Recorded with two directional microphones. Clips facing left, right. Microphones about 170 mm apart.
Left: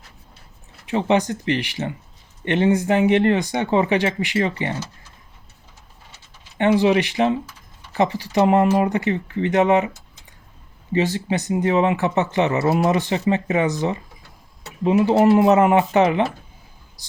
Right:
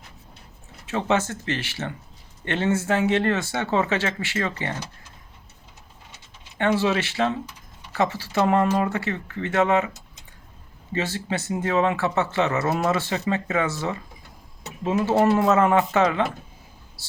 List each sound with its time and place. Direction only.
0.9 s speech: 15° left (ahead or behind)
6.6 s speech: 15° left (ahead or behind)
10.9 s speech: 15° left (ahead or behind)